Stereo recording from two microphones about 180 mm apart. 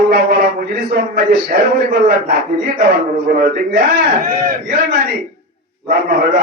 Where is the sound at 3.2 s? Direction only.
55° right (ahead or behind).